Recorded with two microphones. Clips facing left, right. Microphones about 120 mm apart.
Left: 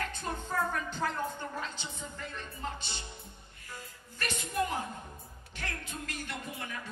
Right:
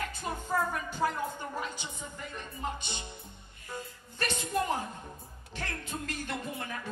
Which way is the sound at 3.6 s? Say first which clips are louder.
Right 6 dB; 25° right (ahead or behind).